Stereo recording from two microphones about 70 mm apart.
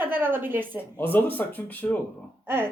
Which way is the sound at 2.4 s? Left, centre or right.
Right.